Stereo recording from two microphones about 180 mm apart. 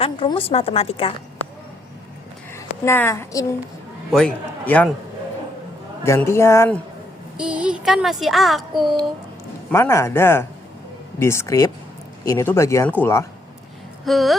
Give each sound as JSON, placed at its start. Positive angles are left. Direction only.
{"t": 0.0, "sound": "a woman's voice", "side_deg": 30}
{"t": 2.5, "sound": "a woman's voice", "side_deg": 15}
{"t": 6.1, "sound": "speech", "side_deg": 15}
{"t": 7.3, "sound": "speech", "side_deg": -5}
{"t": 9.7, "sound": "speech", "side_deg": 15}
{"t": 14.0, "sound": "speech", "side_deg": 0}